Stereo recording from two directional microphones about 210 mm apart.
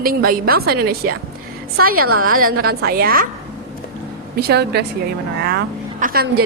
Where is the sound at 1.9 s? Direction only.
90° right.